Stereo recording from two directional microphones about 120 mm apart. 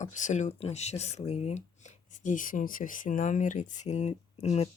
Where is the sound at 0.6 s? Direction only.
65° left (ahead or behind).